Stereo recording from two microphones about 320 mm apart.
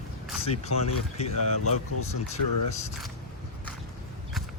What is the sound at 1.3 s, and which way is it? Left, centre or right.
Speech, left.